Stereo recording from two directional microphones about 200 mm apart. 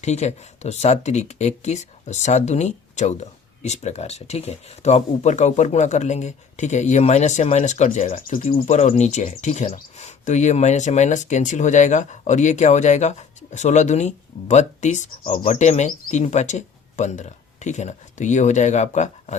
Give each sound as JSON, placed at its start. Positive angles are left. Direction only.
{"t": 0.0, "sound": "speech", "side_deg": 35}